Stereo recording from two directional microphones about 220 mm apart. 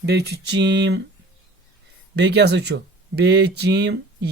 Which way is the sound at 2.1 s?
50° right (ahead or behind).